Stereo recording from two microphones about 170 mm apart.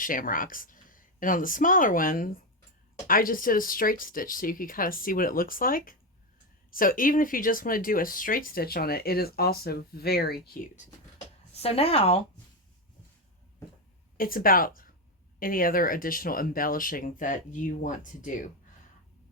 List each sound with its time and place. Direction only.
0.0 s speech: 55° left (ahead or behind)
11.5 s speech: 35° left (ahead or behind)
14.2 s speech: 55° left (ahead or behind)